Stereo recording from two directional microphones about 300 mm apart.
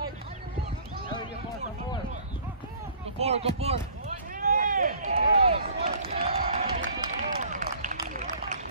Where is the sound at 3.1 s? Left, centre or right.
Right.